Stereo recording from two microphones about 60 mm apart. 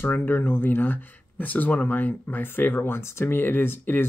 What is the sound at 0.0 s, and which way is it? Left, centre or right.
Speech, left.